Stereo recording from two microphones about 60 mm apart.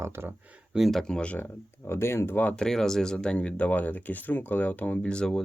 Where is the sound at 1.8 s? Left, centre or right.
Left.